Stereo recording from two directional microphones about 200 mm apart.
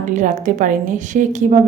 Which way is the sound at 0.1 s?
40° right (ahead or behind).